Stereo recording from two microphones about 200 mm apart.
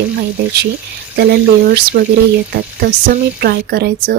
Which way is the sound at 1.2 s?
50° right (ahead or behind).